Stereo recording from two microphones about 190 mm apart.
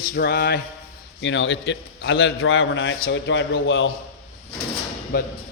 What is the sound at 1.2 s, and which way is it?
A man's voice, 75° left (ahead or behind).